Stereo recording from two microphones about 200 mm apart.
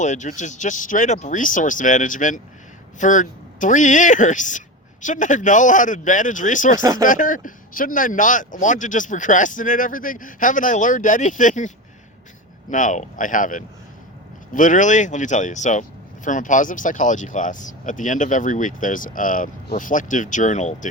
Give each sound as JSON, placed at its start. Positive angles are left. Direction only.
{"t": 0.0, "sound": "speech", "side_deg": 35}
{"t": 12.7, "sound": "speech", "side_deg": 40}